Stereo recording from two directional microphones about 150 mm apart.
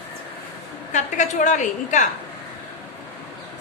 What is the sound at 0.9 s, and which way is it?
A woman's voice, 50° left (ahead or behind).